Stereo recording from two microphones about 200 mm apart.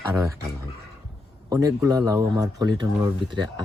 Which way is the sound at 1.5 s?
15° right (ahead or behind).